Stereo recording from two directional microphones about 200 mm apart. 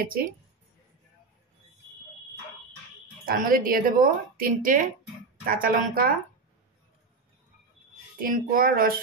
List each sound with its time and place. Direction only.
0.0 s speech: 45° right (ahead or behind)
3.3 s speech: 45° right (ahead or behind)
8.2 s speech: 45° right (ahead or behind)